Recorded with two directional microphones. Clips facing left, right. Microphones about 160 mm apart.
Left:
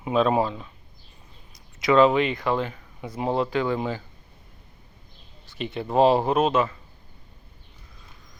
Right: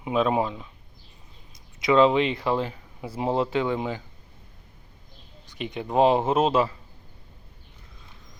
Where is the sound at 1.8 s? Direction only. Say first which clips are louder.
Left 1 dB; 25° right (ahead or behind).